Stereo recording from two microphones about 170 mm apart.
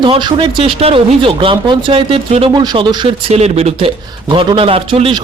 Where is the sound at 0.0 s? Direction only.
25° right (ahead or behind).